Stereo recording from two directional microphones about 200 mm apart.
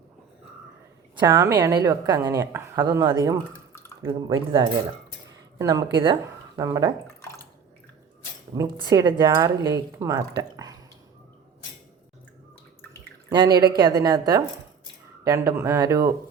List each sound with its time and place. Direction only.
1.2 s a woman's voice: 15° right (ahead or behind)
8.5 s a woman's voice: 15° right (ahead or behind)
13.6 s a woman's voice: 20° right (ahead or behind)